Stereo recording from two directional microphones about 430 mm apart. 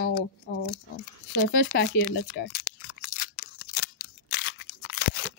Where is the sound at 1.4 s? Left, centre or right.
Left.